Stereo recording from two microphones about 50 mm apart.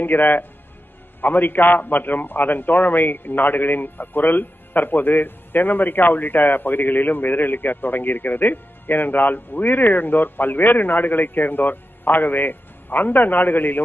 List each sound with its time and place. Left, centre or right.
0.0 s a man's voice: left